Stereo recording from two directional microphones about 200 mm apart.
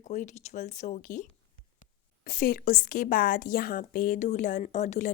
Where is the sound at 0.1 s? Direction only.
35° left (ahead or behind).